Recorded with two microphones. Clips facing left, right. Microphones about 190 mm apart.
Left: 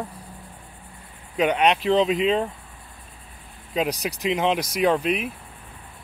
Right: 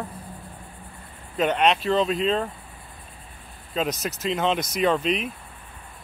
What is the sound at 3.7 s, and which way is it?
Speech, 15° left (ahead or behind).